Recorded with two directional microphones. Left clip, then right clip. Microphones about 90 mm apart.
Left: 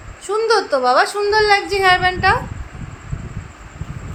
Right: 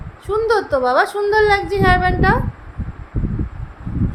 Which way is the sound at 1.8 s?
30° right (ahead or behind).